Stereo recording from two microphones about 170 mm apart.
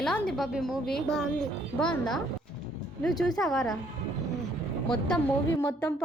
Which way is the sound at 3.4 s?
Centre (ahead or behind).